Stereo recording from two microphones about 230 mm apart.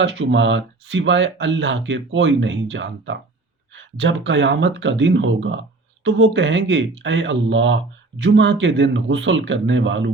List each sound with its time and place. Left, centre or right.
0.0 s speech: right